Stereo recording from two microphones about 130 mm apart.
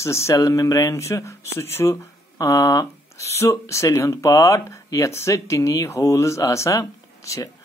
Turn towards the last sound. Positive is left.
turn(degrees=25)  # may be behind; listen again after turning